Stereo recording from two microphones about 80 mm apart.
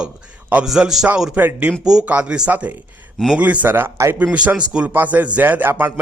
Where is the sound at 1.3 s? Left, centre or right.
Right.